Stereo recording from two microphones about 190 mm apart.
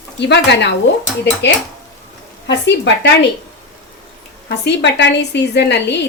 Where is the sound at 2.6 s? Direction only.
65° left (ahead or behind).